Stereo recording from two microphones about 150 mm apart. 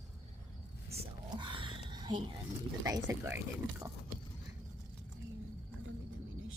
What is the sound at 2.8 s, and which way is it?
Speech, 20° right (ahead or behind).